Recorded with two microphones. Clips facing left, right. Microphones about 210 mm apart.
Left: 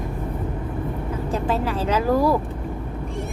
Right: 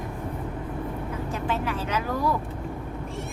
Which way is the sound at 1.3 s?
35° left (ahead or behind).